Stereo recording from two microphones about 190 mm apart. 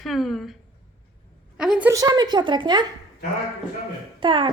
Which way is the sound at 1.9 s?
20° right (ahead or behind).